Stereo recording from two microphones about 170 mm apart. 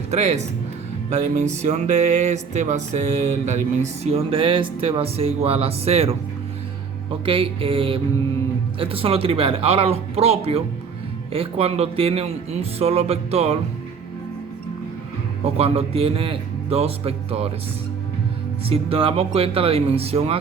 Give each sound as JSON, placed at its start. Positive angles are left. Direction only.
{"t": 0.1, "sound": "speech", "side_deg": -40}
{"t": 7.3, "sound": "speech", "side_deg": -30}
{"t": 15.5, "sound": "speech", "side_deg": -35}
{"t": 18.7, "sound": "speech", "side_deg": -35}